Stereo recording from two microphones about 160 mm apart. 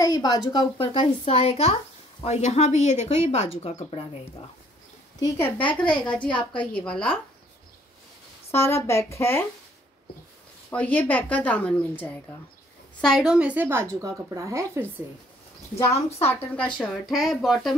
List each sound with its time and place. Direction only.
0.0 s a sound: 25° left (ahead or behind)
0.5 s a woman's voice: 30° left (ahead or behind)
5.2 s a woman's voice: 10° left (ahead or behind)
5.9 s a woman's voice: 30° left (ahead or behind)
6.8 s a woman's voice: 5° left (ahead or behind)
8.5 s a woman's voice: 15° left (ahead or behind)
10.7 s a woman's voice: 10° left (ahead or behind)
13.0 s a woman's voice: centre (ahead or behind); by 14.9 s 20° right (ahead or behind)
16.3 s speech: 10° left (ahead or behind)